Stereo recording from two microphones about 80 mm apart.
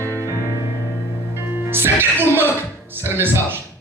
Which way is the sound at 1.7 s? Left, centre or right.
Right.